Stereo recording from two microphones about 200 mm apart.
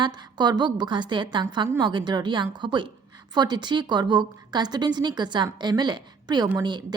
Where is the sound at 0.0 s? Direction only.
20° right (ahead or behind).